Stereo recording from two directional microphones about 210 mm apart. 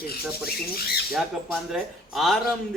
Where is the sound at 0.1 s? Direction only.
45° left (ahead or behind).